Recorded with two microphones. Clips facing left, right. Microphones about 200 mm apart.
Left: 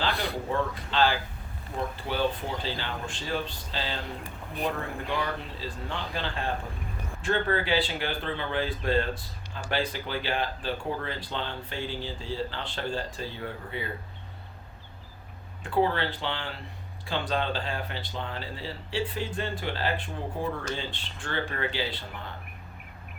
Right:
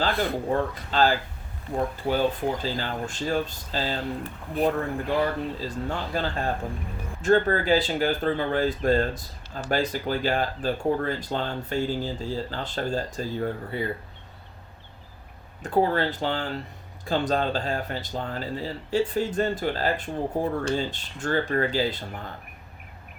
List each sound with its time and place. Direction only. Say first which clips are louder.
0.0 s speech: right 5 dB; 45° right (ahead or behind)
15.6 s speech: right 3 dB; 45° right (ahead or behind)